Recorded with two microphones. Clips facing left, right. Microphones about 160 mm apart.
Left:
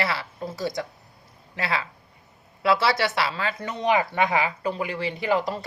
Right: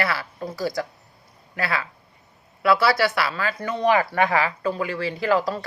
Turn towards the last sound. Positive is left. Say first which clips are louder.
# right 2 dB
turn(degrees=20)  # may be behind; listen again after turning